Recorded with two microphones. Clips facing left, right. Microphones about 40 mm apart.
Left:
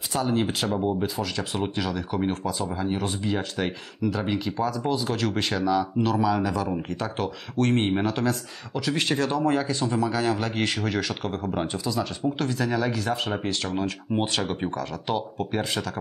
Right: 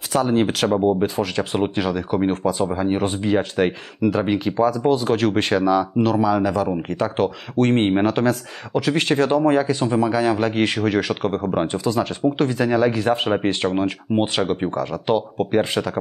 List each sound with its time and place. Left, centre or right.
0.1 s speech: right